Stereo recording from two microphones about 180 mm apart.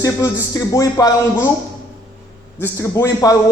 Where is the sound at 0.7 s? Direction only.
20° left (ahead or behind).